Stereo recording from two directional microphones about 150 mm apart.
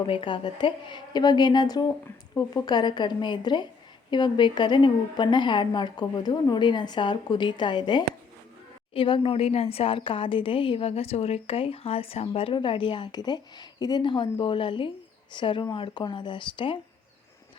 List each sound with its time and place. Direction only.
0.0 s a woman's voice: 35° left (ahead or behind)